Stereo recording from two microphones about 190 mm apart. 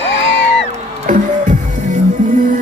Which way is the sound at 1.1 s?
45° right (ahead or behind).